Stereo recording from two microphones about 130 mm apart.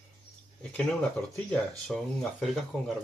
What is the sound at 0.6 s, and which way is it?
Speech, 10° left (ahead or behind).